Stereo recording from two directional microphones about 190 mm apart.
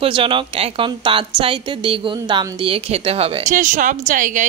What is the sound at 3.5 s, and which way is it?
Speech, 40° right (ahead or behind).